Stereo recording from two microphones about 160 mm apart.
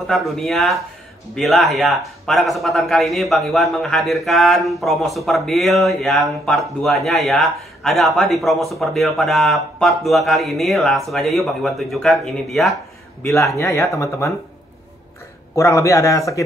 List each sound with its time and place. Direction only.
0.0 s speech: centre (ahead or behind)
13.2 s a man's voice: 20° left (ahead or behind)
15.5 s a man's voice: 20° left (ahead or behind)